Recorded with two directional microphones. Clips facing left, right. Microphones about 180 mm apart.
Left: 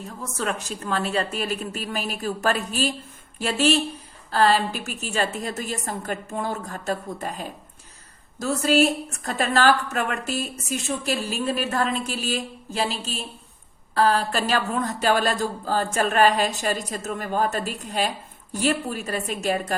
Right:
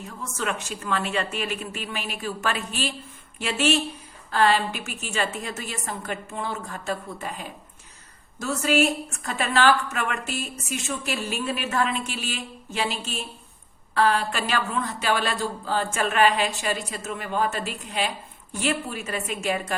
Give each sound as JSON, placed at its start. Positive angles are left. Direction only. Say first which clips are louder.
{"t": 0.2, "sound": "speech", "louder": "left 1 dB", "side_deg": 35}